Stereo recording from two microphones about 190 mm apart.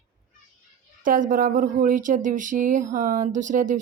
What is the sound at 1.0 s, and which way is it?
A woman's voice, 45° right (ahead or behind).